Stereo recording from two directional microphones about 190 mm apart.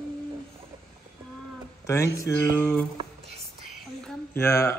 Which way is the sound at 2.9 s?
30° right (ahead or behind).